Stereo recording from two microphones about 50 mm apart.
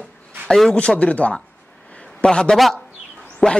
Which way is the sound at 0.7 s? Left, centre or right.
Left.